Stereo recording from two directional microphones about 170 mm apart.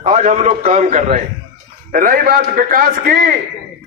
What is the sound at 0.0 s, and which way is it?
A man's voice, 40° right (ahead or behind).